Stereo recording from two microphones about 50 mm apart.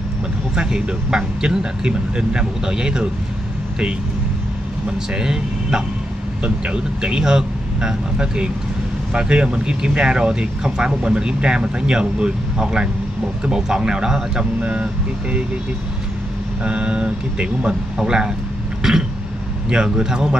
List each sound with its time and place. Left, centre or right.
0.6 s speech: centre
5.1 s speech: centre
14.6 s speech: right
16.6 s speech: right
18.8 s cough: centre
19.7 s speech: centre